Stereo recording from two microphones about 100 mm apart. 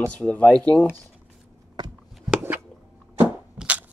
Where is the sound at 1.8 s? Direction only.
45° right (ahead or behind).